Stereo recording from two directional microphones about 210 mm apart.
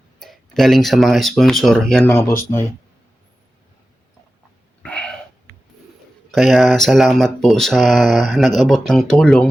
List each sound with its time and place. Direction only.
0.2 s speech: centre (ahead or behind)
4.8 s throat clearing: 5° left (ahead or behind)
6.3 s speech: centre (ahead or behind)